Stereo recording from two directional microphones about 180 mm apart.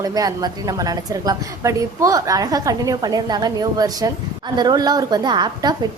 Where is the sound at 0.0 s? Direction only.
20° right (ahead or behind).